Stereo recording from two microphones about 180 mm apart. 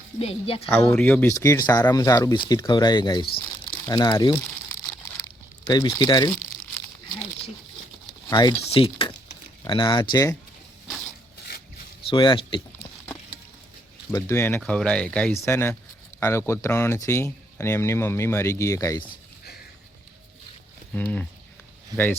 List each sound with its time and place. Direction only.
0.2 s a woman's voice: 30° left (ahead or behind)
0.7 s speech: 10° left (ahead or behind)
5.2 s a sound: 20° left (ahead or behind)
8.3 s speech: 25° left (ahead or behind)
10.8 s a sound: centre (ahead or behind)
12.0 s speech: 25° left (ahead or behind)
14.1 s speech: 15° left (ahead or behind)
20.9 s speech: 10° left (ahead or behind)